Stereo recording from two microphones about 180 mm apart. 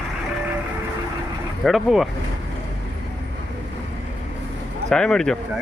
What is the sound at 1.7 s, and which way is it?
Speech, centre (ahead or behind).